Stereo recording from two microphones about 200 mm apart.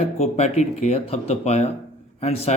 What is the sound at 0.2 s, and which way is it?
Speech, 35° left (ahead or behind).